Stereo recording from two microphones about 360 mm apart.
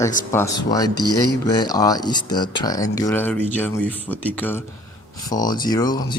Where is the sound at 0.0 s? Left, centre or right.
Centre.